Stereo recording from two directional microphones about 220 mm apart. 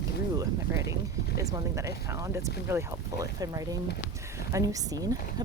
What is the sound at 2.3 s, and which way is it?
Speech, 10° right (ahead or behind).